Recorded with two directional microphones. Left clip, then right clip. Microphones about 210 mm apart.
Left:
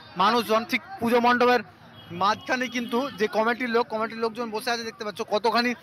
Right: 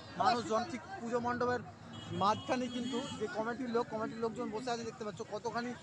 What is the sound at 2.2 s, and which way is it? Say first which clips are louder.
Speech: left 9 dB; 5° left (ahead or behind).